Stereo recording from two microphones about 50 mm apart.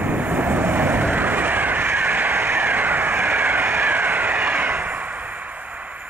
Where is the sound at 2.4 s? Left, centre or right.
Right.